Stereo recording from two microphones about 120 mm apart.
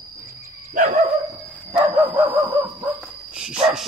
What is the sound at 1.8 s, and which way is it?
Bow-wow, 15° right (ahead or behind).